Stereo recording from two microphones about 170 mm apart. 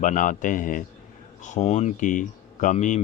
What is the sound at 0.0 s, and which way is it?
Speech, 50° left (ahead or behind).